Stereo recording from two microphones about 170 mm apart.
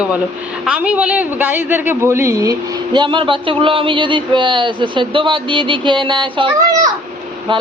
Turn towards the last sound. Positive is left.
turn(degrees=-30)  # may be behind; listen again after turning